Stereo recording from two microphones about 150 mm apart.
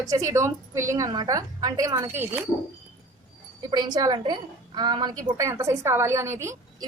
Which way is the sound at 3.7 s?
30° right (ahead or behind).